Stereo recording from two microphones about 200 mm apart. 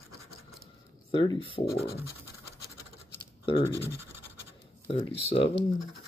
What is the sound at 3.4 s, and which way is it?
Speech, 25° left (ahead or behind).